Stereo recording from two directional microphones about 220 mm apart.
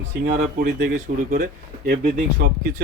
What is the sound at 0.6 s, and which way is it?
A man's voice, 35° right (ahead or behind).